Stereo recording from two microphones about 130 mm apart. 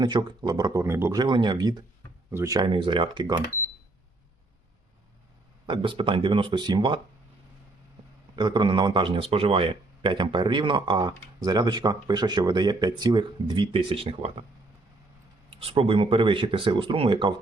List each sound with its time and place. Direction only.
0.0 s speech: 30° right (ahead or behind)
1.2 s speech: 35° right (ahead or behind)
2.6 s speech: 40° right (ahead or behind)
5.6 s speech: 40° right (ahead or behind)
8.4 s speech: 35° right (ahead or behind)
15.4 s speech: 45° right (ahead or behind)